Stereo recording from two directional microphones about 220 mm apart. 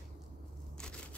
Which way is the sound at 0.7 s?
5° left (ahead or behind).